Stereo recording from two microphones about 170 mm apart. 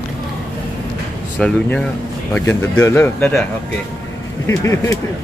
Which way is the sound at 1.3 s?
5° left (ahead or behind).